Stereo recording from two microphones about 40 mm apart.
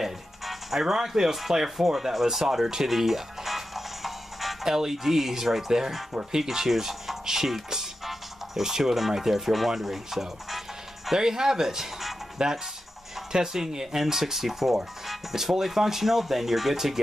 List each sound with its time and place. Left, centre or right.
0.0 s speech: centre
12.4 s speech: centre